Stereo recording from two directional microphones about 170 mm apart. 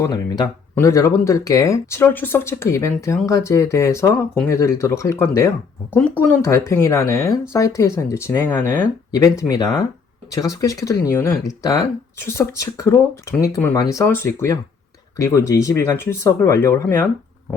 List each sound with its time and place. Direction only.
0.0 s speech: 20° left (ahead or behind)